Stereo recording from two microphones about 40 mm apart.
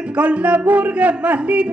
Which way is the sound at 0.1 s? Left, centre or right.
Right.